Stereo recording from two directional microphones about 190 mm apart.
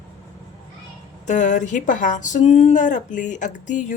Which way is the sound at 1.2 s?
40° left (ahead or behind).